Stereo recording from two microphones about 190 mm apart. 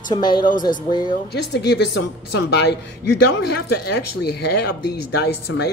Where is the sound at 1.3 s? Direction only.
60° left (ahead or behind).